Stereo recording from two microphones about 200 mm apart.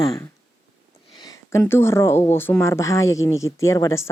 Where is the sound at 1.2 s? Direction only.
15° left (ahead or behind).